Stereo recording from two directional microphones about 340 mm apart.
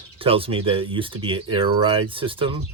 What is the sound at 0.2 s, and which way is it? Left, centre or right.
Speech, centre.